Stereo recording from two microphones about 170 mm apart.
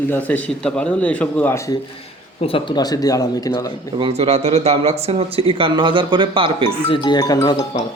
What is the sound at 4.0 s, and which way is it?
Speech, 35° right (ahead or behind).